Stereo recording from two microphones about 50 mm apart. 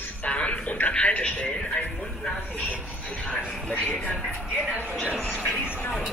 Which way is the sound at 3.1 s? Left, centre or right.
Left.